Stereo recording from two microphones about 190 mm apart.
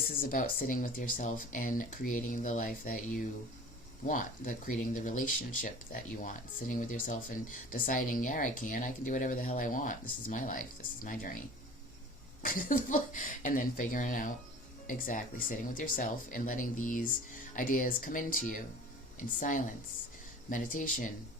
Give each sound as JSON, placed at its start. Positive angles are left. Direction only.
{"t": 0.2, "sound": "speech", "side_deg": 50}